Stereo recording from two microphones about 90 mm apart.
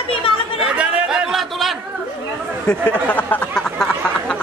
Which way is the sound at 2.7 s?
15° left (ahead or behind).